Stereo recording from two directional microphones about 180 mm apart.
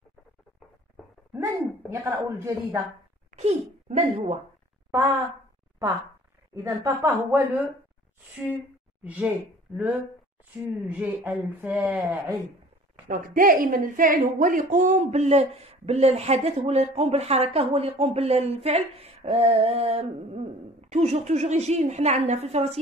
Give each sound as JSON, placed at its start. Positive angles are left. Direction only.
{"t": 1.9, "sound": "speech", "side_deg": -15}
{"t": 3.3, "sound": "a sound", "side_deg": -40}
{"t": 4.9, "sound": "a woman's voice", "side_deg": -20}
{"t": 6.5, "sound": "speech", "side_deg": -20}
{"t": 9.0, "sound": "speech", "side_deg": -10}
{"t": 10.6, "sound": "speech", "side_deg": -10}
{"t": 13.3, "sound": "a woman's voice", "side_deg": -50}